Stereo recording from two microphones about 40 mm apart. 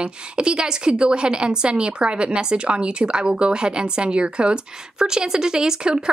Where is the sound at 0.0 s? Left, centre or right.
Right.